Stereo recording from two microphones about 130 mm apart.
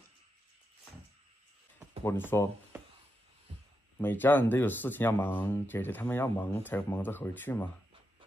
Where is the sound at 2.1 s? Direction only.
20° left (ahead or behind).